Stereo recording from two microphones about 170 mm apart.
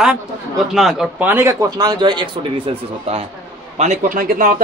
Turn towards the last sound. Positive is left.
turn(degrees=-55)  # may be behind; listen again after turning